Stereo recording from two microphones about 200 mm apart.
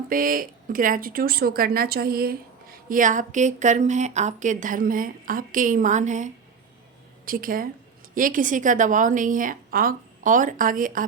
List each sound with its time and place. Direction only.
0.1 s a woman's voice: 45° right (ahead or behind)